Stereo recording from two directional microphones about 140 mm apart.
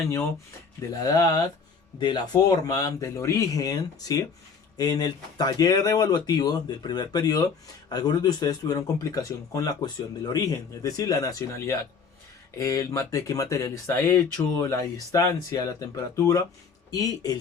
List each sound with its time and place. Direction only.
0.9 s speech: 25° left (ahead or behind)